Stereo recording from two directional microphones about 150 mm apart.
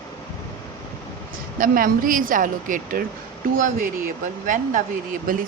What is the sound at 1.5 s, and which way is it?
Speech, 65° right (ahead or behind).